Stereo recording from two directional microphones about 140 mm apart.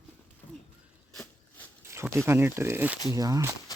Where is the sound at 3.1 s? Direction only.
25° right (ahead or behind).